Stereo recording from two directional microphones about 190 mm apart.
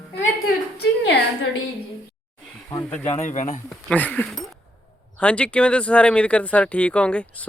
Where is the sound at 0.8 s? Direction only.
65° left (ahead or behind).